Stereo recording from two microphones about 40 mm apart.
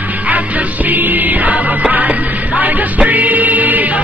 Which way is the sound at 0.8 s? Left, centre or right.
Right.